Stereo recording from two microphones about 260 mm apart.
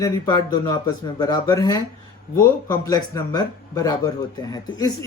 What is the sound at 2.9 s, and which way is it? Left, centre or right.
Speech, centre.